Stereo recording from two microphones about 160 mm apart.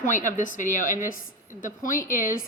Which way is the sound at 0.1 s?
55° left (ahead or behind).